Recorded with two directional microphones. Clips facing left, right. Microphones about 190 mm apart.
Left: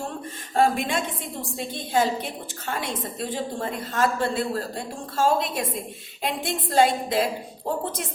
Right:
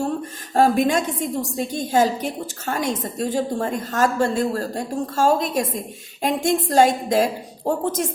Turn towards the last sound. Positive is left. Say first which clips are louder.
# right 6 dB
turn(degrees=-45)  # may be behind; listen again after turning